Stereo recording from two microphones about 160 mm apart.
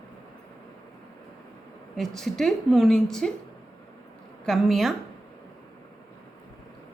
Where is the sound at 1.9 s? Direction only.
Centre (ahead or behind).